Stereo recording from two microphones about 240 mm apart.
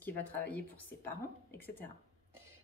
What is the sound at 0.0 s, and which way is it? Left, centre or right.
A woman's voice, centre.